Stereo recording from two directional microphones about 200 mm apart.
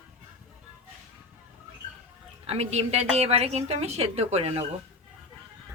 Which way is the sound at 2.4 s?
30° right (ahead or behind).